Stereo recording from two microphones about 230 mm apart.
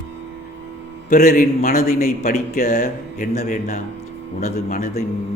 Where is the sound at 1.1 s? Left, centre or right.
Left.